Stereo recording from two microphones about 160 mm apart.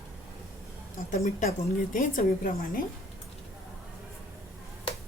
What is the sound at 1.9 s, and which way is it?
Speech, 60° left (ahead or behind).